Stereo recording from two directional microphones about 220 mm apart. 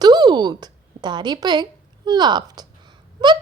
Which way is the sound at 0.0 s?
20° right (ahead or behind).